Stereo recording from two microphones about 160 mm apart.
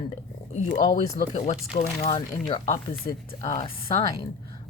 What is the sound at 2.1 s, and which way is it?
Speech, 30° left (ahead or behind).